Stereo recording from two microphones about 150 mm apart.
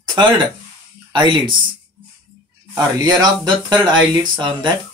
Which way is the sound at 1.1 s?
30° right (ahead or behind).